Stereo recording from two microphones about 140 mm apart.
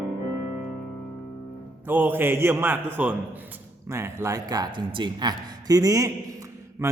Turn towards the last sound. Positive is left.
turn(degrees=-20)  # may be behind; listen again after turning